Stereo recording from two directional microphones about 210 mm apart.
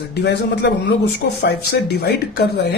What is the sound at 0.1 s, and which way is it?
Speech, 55° left (ahead or behind).